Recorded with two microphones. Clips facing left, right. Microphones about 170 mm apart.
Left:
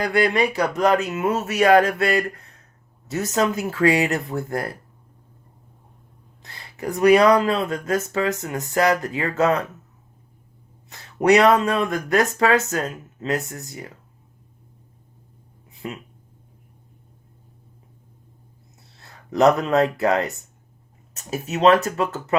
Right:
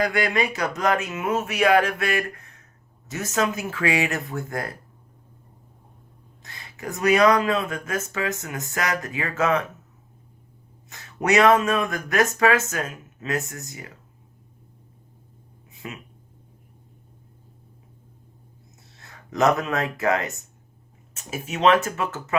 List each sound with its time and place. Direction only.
0.9 s speech: 40° left (ahead or behind)
6.4 s speech: 30° left (ahead or behind)
10.8 s speech: 30° left (ahead or behind)
19.3 s speech: 30° left (ahead or behind)